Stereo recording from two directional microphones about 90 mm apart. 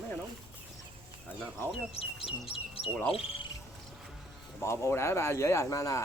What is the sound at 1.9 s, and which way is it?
Speech, 90° left.